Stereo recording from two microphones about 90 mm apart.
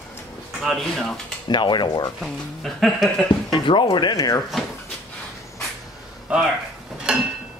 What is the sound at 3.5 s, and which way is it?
Speech, 65° left (ahead or behind).